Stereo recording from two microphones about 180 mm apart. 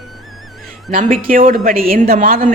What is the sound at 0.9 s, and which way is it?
Speech, 50° right (ahead or behind).